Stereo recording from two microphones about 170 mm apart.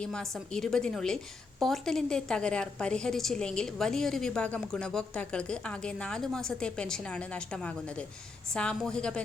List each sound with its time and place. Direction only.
0.0 s a woman's voice: 5° left (ahead or behind)